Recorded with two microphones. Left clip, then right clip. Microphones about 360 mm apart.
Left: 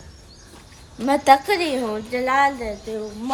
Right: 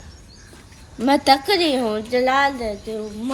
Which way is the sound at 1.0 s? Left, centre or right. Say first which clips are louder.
Left 1 dB; centre.